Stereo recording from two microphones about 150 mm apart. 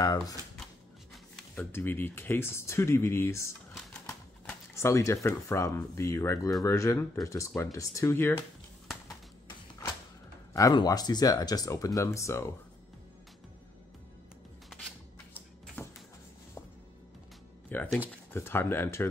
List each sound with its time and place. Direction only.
0.0 s speech: 25° left (ahead or behind)
1.1 s speech: 10° left (ahead or behind)
4.7 s speech: 20° left (ahead or behind)
10.5 s speech: 25° left (ahead or behind)
15.3 s a sound: 10° left (ahead or behind)
17.7 s speech: 15° left (ahead or behind)